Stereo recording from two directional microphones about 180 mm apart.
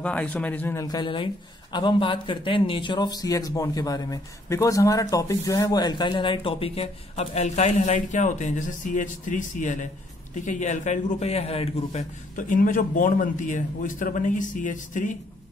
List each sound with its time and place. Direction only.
0.0 s a man's voice: 5° left (ahead or behind); by 15.1 s 45° left (ahead or behind)